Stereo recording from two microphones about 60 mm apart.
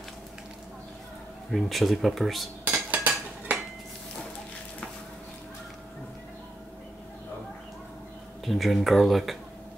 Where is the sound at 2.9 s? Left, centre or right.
Right.